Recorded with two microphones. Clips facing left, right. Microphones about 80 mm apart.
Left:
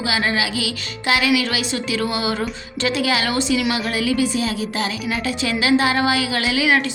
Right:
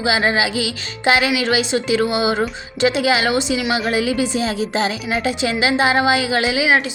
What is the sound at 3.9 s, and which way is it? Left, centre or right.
Music, right.